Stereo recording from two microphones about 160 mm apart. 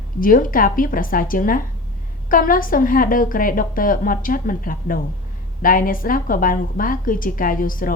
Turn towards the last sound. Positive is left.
turn(degrees=60)  # may be behind; listen again after turning